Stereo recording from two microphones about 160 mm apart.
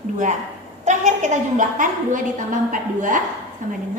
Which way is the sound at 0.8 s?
50° right (ahead or behind).